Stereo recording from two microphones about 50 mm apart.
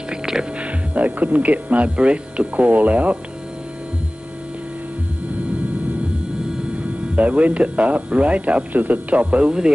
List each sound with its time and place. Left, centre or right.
0.1 s speech: centre
7.2 s speech: right